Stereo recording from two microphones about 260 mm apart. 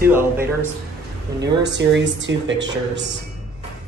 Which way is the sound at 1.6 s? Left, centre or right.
Right.